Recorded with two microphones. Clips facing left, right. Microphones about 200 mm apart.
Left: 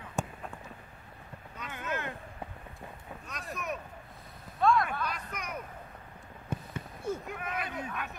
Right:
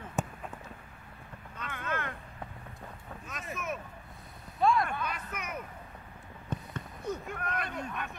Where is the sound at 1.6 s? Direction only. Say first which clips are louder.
Even; 10° left (ahead or behind).